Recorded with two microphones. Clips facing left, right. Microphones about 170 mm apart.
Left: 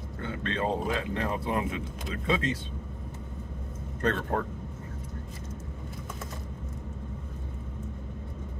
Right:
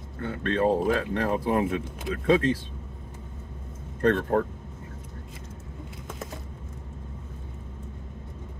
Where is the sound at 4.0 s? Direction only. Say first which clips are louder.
Right 6 dB; 55° right (ahead or behind).